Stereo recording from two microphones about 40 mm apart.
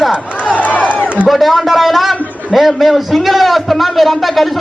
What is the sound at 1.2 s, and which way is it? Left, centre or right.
A man's voice, centre.